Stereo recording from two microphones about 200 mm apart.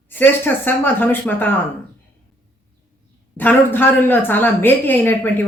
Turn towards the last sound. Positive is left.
turn(degrees=10)  # may be behind; listen again after turning